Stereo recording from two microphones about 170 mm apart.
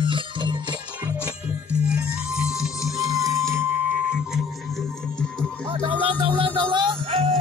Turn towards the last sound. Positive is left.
turn(degrees=-30)  # may be behind; listen again after turning